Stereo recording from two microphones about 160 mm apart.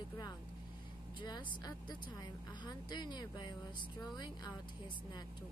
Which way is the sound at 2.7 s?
25° left (ahead or behind).